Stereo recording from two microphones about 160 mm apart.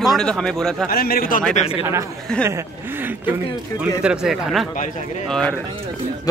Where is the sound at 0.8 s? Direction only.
70° left (ahead or behind).